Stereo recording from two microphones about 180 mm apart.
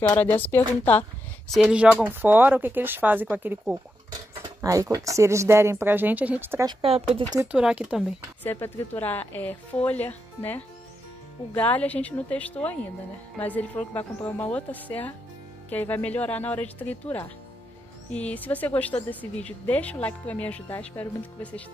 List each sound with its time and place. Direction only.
0.1 s speech: 10° left (ahead or behind)
1.5 s speech: 5° right (ahead or behind)
6.7 s speech: 30° right (ahead or behind)
7.5 s speech: 5° right (ahead or behind)
8.5 s speech: 10° left (ahead or behind)
18.1 s speech: 10° left (ahead or behind)